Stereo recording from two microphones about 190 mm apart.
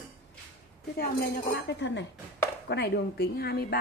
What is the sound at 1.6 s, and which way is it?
A woman's voice, 70° left (ahead or behind).